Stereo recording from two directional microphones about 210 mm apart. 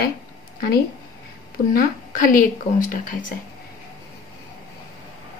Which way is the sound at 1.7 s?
40° left (ahead or behind).